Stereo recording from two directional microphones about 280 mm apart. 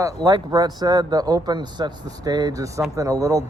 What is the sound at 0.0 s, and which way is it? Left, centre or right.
Speech, centre.